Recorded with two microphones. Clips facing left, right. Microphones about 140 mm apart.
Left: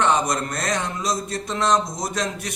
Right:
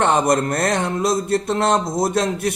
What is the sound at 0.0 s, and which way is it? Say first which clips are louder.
Speech: right 4 dB; 55° right (ahead or behind).